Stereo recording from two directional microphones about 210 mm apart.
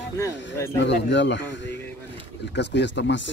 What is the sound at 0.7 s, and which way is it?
Speech, 60° left (ahead or behind).